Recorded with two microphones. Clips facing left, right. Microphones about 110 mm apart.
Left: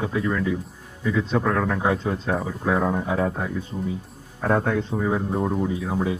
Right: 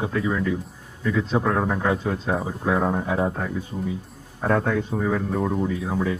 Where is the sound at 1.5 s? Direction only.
20° right (ahead or behind).